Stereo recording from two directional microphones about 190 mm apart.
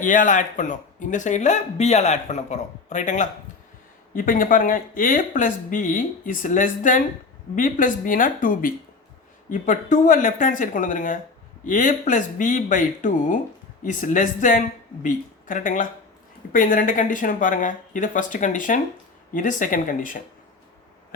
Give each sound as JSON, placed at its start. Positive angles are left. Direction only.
{"t": 0.0, "sound": "speech", "side_deg": 45}